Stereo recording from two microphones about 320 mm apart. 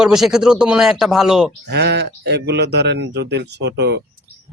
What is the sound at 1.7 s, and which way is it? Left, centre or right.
Speech, right.